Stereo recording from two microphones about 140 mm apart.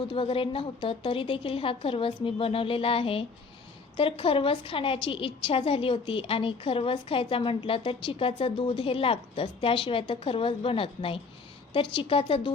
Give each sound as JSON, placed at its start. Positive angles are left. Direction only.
{"t": 0.1, "sound": "a woman's voice", "side_deg": 40}